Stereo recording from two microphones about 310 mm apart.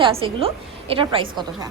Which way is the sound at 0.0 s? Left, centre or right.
Centre.